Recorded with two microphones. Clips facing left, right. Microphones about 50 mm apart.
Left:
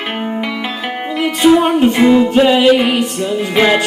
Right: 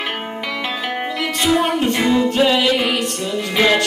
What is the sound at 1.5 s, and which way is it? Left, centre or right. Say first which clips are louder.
Music: left 6 dB; centre.